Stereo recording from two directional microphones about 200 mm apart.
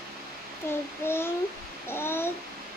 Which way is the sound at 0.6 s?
15° left (ahead or behind).